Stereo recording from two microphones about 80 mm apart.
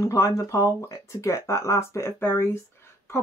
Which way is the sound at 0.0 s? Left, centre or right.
Left.